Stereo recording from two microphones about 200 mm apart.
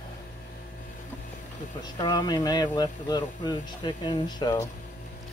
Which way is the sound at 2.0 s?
20° left (ahead or behind).